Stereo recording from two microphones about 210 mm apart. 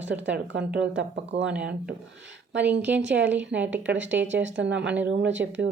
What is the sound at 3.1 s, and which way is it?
Speech, 60° right (ahead or behind).